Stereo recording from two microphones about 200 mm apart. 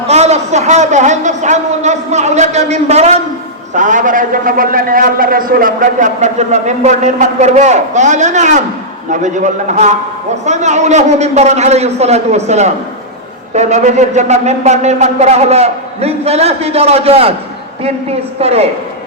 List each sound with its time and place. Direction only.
0.1 s a man's voice: 35° right (ahead or behind)